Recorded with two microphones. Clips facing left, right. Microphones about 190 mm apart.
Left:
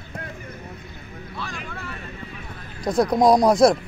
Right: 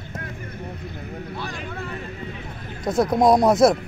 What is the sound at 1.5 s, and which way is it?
Vehicle, 35° right (ahead or behind).